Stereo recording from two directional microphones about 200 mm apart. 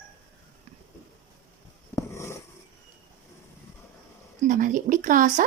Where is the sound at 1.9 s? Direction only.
15° left (ahead or behind).